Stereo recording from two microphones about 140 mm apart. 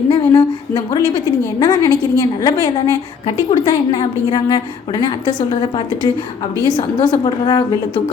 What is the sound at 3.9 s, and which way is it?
A woman's voice, 30° left (ahead or behind).